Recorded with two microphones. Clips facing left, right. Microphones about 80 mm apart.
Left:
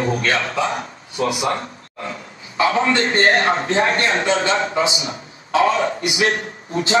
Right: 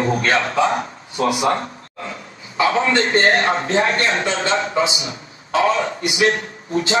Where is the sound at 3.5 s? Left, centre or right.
Left.